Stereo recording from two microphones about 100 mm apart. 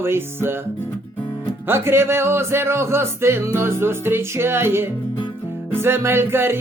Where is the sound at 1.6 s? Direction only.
25° right (ahead or behind).